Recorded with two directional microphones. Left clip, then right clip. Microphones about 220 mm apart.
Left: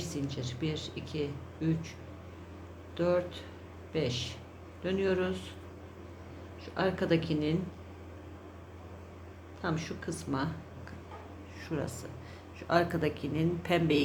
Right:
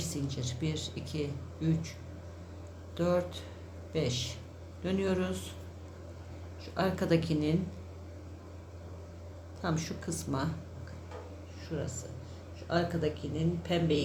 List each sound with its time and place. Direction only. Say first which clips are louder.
0.0 s speech: even; centre (ahead or behind)
3.0 s speech: left 1 dB; centre (ahead or behind)
6.7 s speech: even; centre (ahead or behind)
9.6 s speech: even; centre (ahead or behind)
12.6 s speech: left 3 dB; 30° left (ahead or behind)